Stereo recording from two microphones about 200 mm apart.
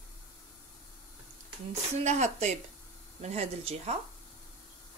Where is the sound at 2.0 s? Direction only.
35° right (ahead or behind).